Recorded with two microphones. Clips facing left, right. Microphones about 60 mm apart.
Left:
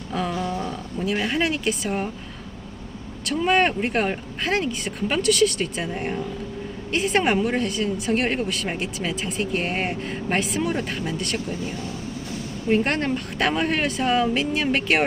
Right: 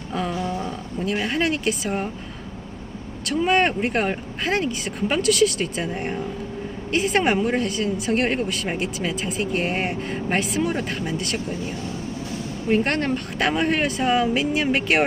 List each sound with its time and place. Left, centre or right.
0.1 s speech: centre
0.4 s a sound: centre
0.9 s speech: centre
3.2 s speech: centre
12.6 s speech: centre